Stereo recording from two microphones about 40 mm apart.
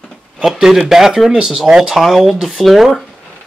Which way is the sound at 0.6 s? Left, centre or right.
Centre.